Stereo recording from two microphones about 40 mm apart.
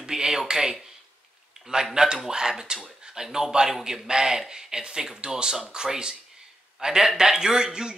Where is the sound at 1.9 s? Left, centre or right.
Centre.